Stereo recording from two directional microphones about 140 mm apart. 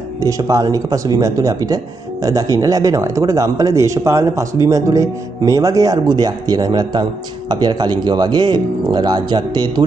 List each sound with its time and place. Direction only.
0.2 s speech: 25° right (ahead or behind)